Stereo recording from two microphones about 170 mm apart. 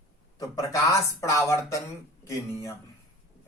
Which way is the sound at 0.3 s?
20° left (ahead or behind).